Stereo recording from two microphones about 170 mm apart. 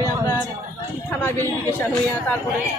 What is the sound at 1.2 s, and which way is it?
Speech, 15° left (ahead or behind).